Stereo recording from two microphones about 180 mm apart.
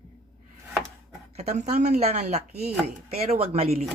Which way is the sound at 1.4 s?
40° right (ahead or behind).